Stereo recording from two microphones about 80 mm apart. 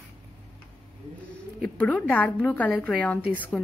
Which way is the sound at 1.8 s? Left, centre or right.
Centre.